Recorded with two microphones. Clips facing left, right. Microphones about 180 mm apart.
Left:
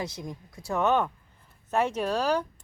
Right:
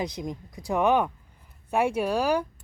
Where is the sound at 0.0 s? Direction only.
20° right (ahead or behind).